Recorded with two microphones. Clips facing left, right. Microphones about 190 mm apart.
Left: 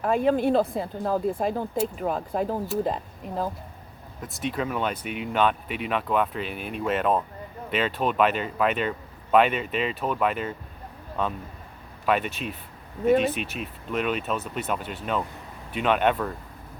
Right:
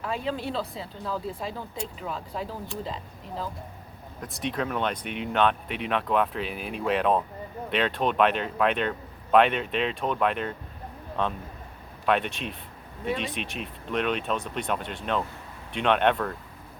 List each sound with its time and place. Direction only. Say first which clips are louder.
0.0 s speech: left 9 dB; 50° left (ahead or behind)
4.2 s speech: left 1 dB; centre (ahead or behind)